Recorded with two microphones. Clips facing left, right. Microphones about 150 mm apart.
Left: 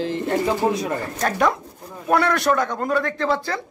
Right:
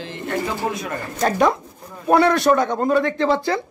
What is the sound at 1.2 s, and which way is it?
Speech, 20° right (ahead or behind).